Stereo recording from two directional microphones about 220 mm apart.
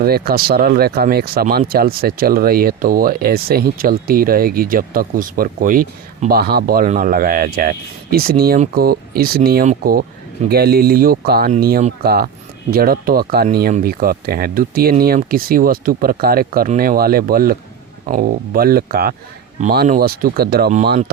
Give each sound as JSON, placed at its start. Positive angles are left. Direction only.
{"t": 0.0, "sound": "speech", "side_deg": -45}